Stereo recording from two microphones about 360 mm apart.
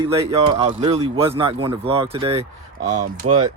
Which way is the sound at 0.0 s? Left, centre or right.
Centre.